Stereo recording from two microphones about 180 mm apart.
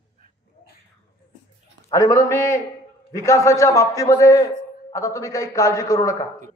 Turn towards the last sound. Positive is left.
turn(degrees=20)  # may be behind; listen again after turning